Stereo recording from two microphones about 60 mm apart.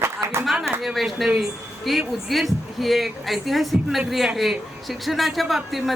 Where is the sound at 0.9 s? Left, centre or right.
Centre.